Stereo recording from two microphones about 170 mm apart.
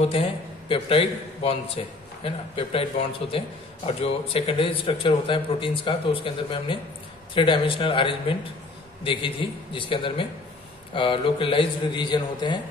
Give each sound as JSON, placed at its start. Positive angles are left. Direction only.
{"t": 0.0, "sound": "a man's voice", "side_deg": 35}